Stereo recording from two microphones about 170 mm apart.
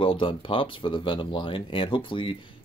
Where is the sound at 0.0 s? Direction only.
30° left (ahead or behind).